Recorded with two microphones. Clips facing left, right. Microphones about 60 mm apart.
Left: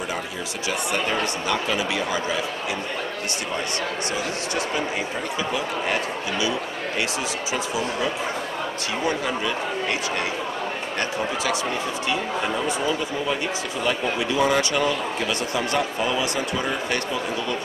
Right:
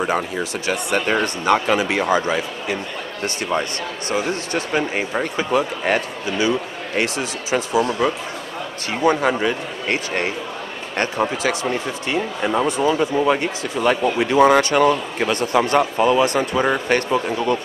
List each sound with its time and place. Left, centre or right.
0.7 s speech: right
7.5 s speech: right
12.8 s speech: right